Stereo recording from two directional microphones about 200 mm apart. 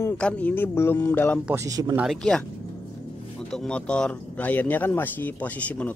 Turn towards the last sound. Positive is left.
turn(degrees=10)  # may be behind; listen again after turning